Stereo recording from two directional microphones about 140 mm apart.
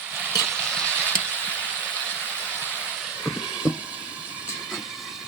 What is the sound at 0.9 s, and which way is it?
Frying, 15° right (ahead or behind).